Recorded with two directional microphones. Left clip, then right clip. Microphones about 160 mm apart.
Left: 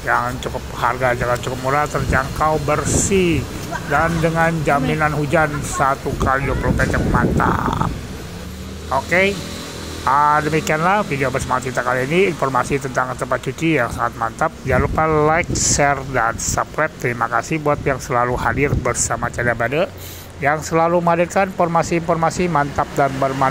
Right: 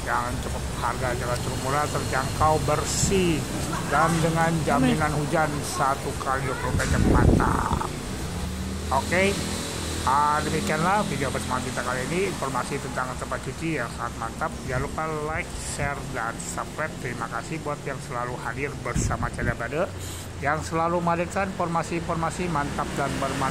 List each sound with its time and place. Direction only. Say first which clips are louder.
0.0 s speech: left 8 dB; 30° left (ahead or behind)
3.9 s speech: left 5 dB; 30° left (ahead or behind)
8.9 s speech: left 6 dB; 25° left (ahead or behind); by 18.9 s 40° left (ahead or behind)
18.9 s speech: left 8 dB; 30° left (ahead or behind)